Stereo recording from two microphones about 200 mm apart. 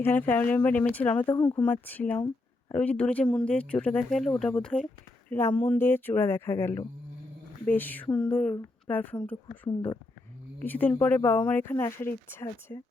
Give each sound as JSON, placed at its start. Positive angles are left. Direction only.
{"t": 0.0, "sound": "a woman's voice", "side_deg": 10}
{"t": 9.6, "sound": "speech", "side_deg": 20}
{"t": 10.6, "sound": "speech", "side_deg": 10}